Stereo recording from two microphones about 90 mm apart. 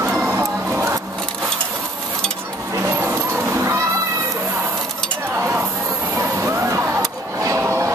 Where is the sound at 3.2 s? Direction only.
25° right (ahead or behind).